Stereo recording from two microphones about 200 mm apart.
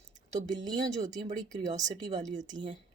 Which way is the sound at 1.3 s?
35° right (ahead or behind).